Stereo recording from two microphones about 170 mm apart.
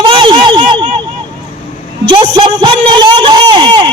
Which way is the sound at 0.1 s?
30° right (ahead or behind).